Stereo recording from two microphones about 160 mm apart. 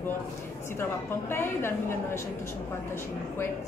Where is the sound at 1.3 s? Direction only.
15° left (ahead or behind).